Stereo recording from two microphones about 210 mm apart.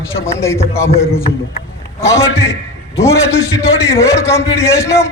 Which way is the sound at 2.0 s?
15° left (ahead or behind).